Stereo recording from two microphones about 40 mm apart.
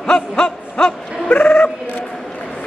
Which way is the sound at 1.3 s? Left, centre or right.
Left.